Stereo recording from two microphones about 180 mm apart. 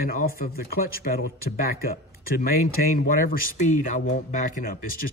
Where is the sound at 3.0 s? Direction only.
55° left (ahead or behind).